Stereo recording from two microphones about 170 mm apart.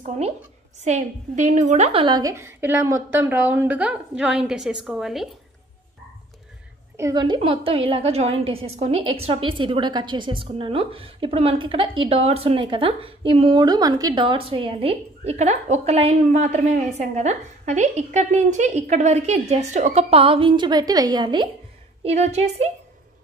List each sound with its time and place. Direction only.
0.7 s a woman's voice: 40° right (ahead or behind); by 5.3 s centre (ahead or behind)
7.0 s a woman's voice: 20° right (ahead or behind)
22.0 s a woman's voice: 40° right (ahead or behind)